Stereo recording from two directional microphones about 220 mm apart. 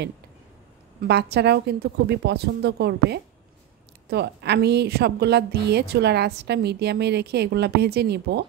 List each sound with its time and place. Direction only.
1.0 s a woman's voice: 50° right (ahead or behind)